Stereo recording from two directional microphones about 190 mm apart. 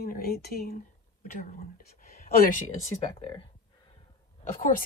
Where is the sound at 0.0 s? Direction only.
50° left (ahead or behind).